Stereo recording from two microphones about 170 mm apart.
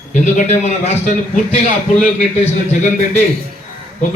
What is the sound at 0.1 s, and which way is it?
A man's voice, 45° left (ahead or behind).